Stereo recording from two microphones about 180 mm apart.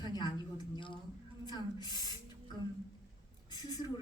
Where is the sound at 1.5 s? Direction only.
25° left (ahead or behind).